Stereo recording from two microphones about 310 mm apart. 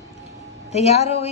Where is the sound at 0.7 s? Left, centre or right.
Centre.